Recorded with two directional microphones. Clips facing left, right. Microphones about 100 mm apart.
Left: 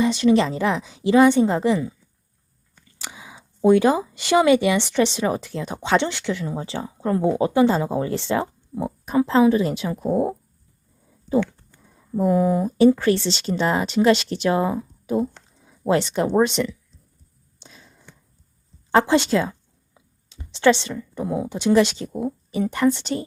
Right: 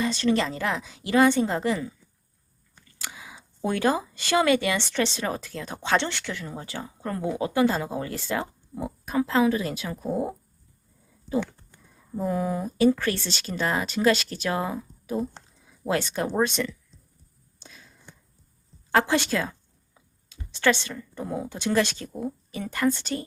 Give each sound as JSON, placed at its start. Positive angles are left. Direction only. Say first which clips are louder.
{"t": 0.0, "sound": "speech", "louder": "left 6 dB", "side_deg": 15}
{"t": 3.0, "sound": "speech", "louder": "left 2 dB", "side_deg": 20}
{"t": 12.2, "sound": "speech", "louder": "left 8 dB", "side_deg": 20}
{"t": 17.6, "sound": "a sound", "louder": "left 2 dB", "side_deg": 25}
{"t": 18.9, "sound": "speech", "louder": "left 5 dB", "side_deg": 20}